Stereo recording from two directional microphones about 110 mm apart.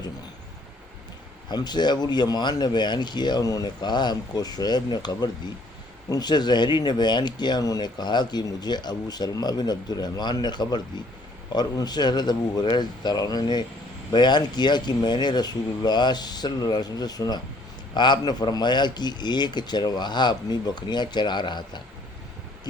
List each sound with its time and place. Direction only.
1.5 s speech: 40° left (ahead or behind)